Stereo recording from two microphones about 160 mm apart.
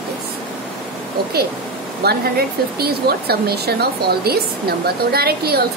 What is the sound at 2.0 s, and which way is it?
Speech, 75° right (ahead or behind).